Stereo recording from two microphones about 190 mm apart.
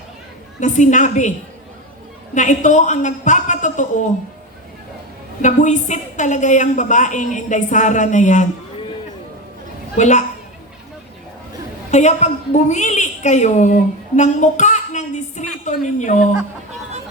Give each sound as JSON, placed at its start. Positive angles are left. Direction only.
{"t": 0.6, "sound": "a woman's voice", "side_deg": 40}
{"t": 2.3, "sound": "a woman's voice", "side_deg": 40}
{"t": 5.4, "sound": "a woman's voice", "side_deg": 40}
{"t": 10.0, "sound": "a woman's voice", "side_deg": 40}
{"t": 11.9, "sound": "a woman's voice", "side_deg": 35}